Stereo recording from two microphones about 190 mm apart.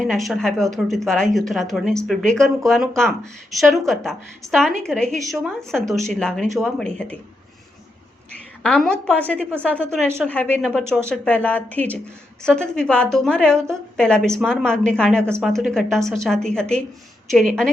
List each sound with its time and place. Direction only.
0.0 s speech: centre (ahead or behind)
4.4 s a woman's voice: 15° right (ahead or behind)
4.8 s speech: 5° left (ahead or behind)
8.6 s a woman's voice: 5° left (ahead or behind)